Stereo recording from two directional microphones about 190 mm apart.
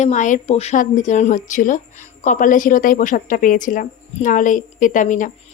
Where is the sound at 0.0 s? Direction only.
40° left (ahead or behind).